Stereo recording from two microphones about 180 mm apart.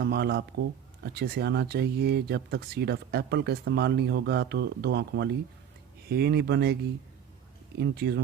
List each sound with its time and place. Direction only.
0.0 s speech: 65° right (ahead or behind)
7.8 s speech: 70° right (ahead or behind)